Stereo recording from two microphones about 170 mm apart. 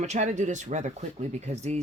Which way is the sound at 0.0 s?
45° right (ahead or behind).